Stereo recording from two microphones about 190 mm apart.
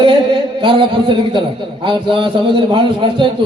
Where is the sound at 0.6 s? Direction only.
25° right (ahead or behind).